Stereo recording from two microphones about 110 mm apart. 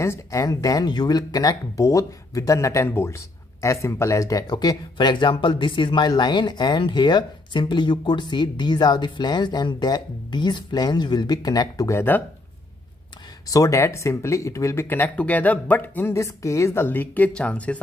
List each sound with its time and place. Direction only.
0.0 s speech: 30° left (ahead or behind)
13.5 s speech: 30° left (ahead or behind); by 17.7 s 10° left (ahead or behind)